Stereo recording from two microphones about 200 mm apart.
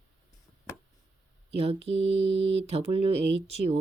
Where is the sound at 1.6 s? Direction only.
30° right (ahead or behind).